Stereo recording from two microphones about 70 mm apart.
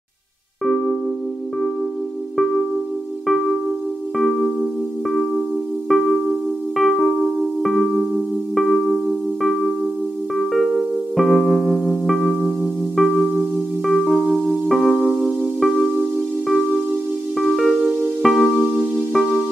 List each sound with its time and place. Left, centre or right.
3.3 s music: centre
6.8 s keyboard: centre
8.5 s music: centre
10.3 s electric piano: centre
13.8 s music: centre
17.6 s music: centre
18.4 s music: centre